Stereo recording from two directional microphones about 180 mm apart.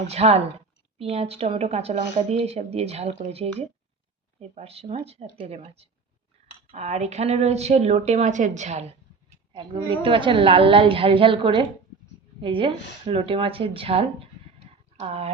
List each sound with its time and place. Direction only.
0.1 s speech: 35° right (ahead or behind)
9.5 s a woman's voice: 25° right (ahead or behind)